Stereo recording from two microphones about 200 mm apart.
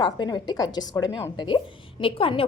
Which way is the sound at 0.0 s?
20° left (ahead or behind).